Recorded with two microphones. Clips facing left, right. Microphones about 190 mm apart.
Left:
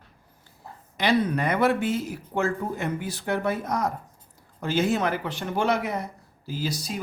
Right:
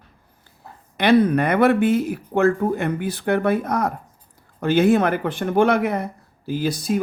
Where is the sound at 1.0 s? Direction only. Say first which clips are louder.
Right 7 dB; 55° right (ahead or behind).